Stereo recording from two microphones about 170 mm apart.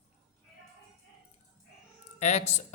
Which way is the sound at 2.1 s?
40° left (ahead or behind).